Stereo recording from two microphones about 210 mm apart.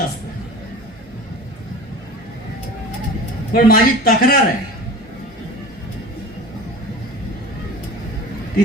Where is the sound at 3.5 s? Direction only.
45° left (ahead or behind).